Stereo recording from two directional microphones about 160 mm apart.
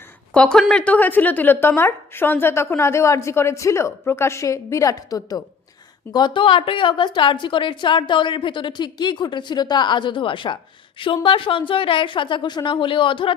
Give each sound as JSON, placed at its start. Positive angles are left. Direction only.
{"t": 0.3, "sound": "a woman's voice", "side_deg": 5}